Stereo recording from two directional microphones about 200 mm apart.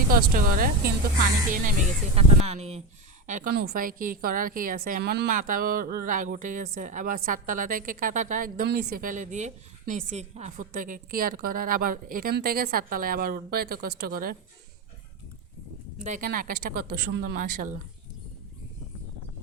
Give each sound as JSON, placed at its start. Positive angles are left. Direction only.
{"t": 0.1, "sound": "a woman's voice", "side_deg": -45}
{"t": 2.2, "sound": "speech", "side_deg": -30}
{"t": 3.2, "sound": "a woman's voice", "side_deg": -40}
{"t": 16.0, "sound": "a woman's voice", "side_deg": -45}